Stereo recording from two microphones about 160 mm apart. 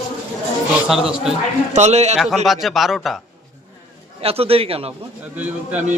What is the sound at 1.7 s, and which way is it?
Speech, 45° right (ahead or behind).